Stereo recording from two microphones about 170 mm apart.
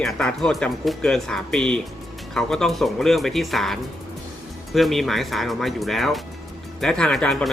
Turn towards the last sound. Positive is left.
turn(degrees=0)  # may be behind; listen again after turning